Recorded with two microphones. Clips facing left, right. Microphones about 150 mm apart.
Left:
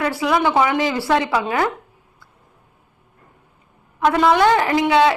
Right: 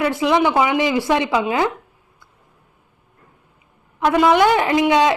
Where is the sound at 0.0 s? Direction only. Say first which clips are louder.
Right 2 dB; 20° right (ahead or behind).